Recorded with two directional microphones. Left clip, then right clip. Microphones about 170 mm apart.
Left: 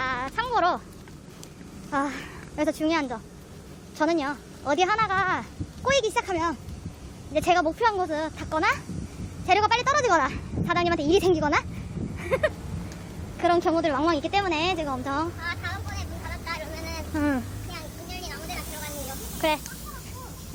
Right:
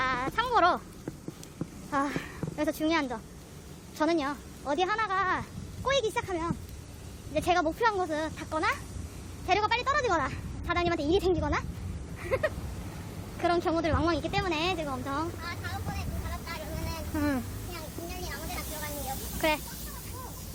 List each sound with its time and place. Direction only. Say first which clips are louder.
0.0 s a sound: left 1 dB; centre (ahead or behind)
1.9 s a woman's voice: left 3 dB; centre (ahead or behind); by 11.6 s 25° left (ahead or behind)
12.2 s a sound: left 5 dB; 15° left (ahead or behind)
13.4 s a woman's voice: left 5 dB; 15° left (ahead or behind)
17.2 s a woman's voice: left 4 dB; 10° left (ahead or behind)
19.4 s speech: left 3 dB; centre (ahead or behind)